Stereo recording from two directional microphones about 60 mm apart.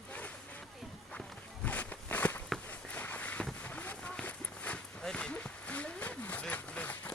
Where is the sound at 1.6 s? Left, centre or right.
Left.